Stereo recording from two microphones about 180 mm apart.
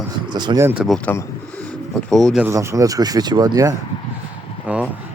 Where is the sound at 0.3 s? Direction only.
25° right (ahead or behind); by 0.9 s 5° right (ahead or behind).